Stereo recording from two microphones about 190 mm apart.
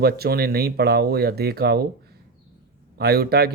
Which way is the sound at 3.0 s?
55° right (ahead or behind).